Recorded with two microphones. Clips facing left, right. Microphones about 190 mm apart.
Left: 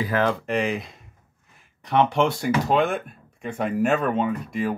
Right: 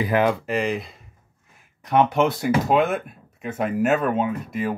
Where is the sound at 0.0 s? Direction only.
15° right (ahead or behind).